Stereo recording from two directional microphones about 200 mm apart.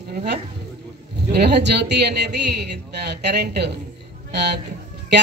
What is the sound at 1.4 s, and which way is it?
A woman's voice, 55° right (ahead or behind).